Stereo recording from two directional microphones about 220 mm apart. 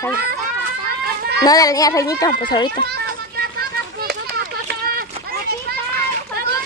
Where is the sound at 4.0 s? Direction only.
45° right (ahead or behind).